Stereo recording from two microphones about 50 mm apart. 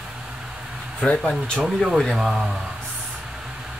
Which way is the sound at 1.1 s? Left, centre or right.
Left.